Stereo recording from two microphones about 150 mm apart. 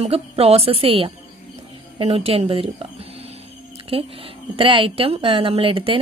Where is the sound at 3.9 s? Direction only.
40° right (ahead or behind).